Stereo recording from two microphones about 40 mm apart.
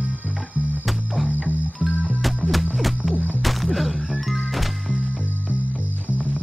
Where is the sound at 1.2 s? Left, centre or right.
Right.